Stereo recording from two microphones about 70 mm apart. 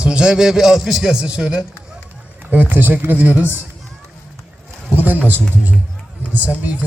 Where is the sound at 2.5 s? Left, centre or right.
Right.